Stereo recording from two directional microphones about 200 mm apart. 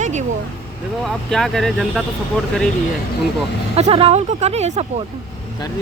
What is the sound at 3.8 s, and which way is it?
Speech, 30° right (ahead or behind).